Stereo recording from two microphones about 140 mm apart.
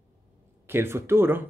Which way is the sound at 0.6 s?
15° right (ahead or behind).